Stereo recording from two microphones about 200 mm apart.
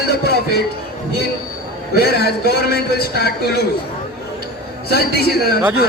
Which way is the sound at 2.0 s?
50° left (ahead or behind).